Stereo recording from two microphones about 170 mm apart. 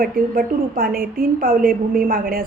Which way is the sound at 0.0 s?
60° right (ahead or behind).